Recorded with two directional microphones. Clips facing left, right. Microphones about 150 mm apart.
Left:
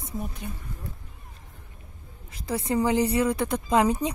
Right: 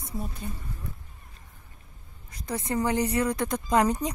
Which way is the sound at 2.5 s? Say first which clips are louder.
Left 3 dB; 10° left (ahead or behind).